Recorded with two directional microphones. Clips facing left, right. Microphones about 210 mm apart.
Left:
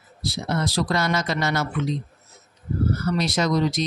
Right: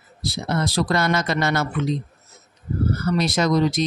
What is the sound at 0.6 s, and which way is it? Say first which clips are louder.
Speech: right 3 dB; 55° right (ahead or behind).